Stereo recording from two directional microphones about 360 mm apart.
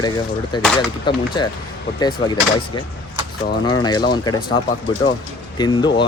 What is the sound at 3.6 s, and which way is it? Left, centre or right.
Speech, centre.